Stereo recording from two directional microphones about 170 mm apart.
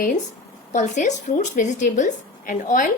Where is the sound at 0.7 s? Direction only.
45° left (ahead or behind).